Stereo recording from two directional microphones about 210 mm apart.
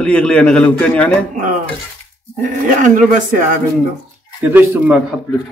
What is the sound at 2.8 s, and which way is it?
Speech, 35° right (ahead or behind).